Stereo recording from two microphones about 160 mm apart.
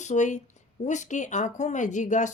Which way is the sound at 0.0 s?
50° left (ahead or behind).